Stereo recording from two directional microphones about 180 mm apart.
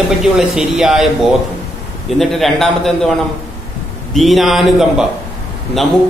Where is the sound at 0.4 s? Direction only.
5° right (ahead or behind).